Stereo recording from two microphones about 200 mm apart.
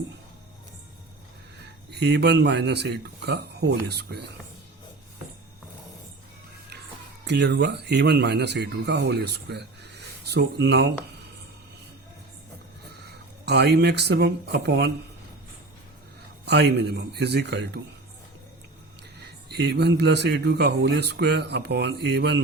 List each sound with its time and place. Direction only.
1.6 s speech: 55° right (ahead or behind)
7.3 s speech: 55° right (ahead or behind)
13.0 s speech: 55° right (ahead or behind)
16.5 s speech: 55° right (ahead or behind)
19.2 s speech: 55° right (ahead or behind)